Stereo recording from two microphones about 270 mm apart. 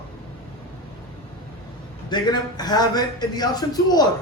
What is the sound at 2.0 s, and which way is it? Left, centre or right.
A man's voice, centre.